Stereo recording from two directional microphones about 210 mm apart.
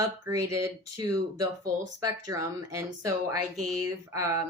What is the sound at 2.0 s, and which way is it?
Speech, 15° right (ahead or behind).